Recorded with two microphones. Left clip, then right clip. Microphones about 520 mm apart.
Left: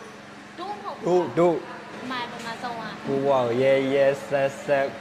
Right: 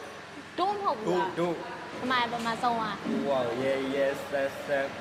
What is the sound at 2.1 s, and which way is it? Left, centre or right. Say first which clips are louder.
Speech: right 4 dB; right.